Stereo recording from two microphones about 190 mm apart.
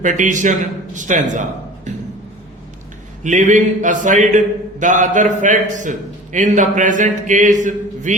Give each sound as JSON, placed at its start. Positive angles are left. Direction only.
{"t": 0.0, "sound": "a man's voice", "side_deg": -40}
{"t": 3.2, "sound": "a man's voice", "side_deg": -40}